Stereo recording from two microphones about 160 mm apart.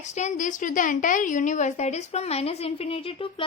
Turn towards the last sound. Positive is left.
turn(degrees=35)  # may be behind; listen again after turning